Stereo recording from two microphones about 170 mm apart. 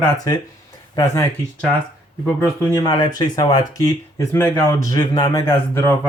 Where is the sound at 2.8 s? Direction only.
25° left (ahead or behind).